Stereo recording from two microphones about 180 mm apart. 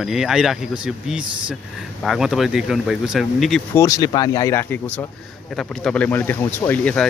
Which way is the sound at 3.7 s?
20° left (ahead or behind).